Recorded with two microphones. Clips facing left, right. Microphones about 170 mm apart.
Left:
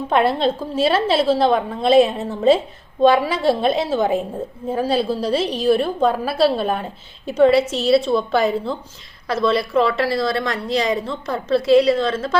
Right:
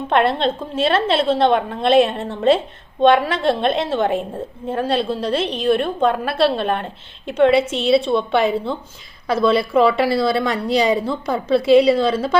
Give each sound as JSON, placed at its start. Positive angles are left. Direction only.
{"t": 0.1, "sound": "a woman's voice", "side_deg": 5}